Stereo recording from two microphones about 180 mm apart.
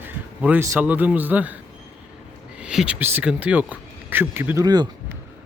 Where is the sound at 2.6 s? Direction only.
5° right (ahead or behind); by 5.1 s 20° right (ahead or behind).